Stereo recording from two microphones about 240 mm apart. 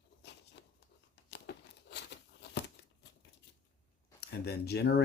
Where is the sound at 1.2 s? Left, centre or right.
Left.